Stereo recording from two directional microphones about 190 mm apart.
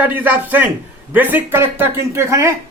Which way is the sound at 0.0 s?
10° right (ahead or behind).